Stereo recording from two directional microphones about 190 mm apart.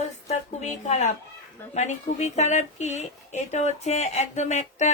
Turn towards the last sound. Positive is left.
turn(degrees=35)  # may be behind; listen again after turning